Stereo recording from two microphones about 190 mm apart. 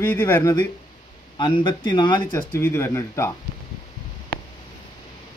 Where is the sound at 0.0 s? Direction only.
10° left (ahead or behind); by 2.2 s 25° left (ahead or behind).